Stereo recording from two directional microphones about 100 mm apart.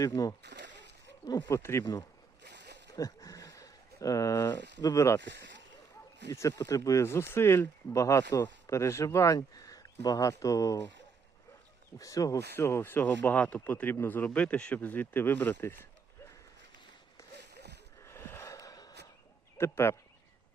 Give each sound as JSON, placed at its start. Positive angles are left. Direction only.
{"t": 0.0, "sound": "speech", "side_deg": 35}
{"t": 1.5, "sound": "speech", "side_deg": 25}
{"t": 1.8, "sound": "speech", "side_deg": 40}
{"t": 2.9, "sound": "a sound", "side_deg": 35}
{"t": 4.8, "sound": "speech", "side_deg": 35}
{"t": 6.6, "sound": "speech", "side_deg": 35}
{"t": 11.9, "sound": "speech", "side_deg": 35}
{"t": 14.3, "sound": "speech", "side_deg": 10}
{"t": 18.0, "sound": "a sound", "side_deg": 25}
{"t": 19.5, "sound": "speech", "side_deg": 25}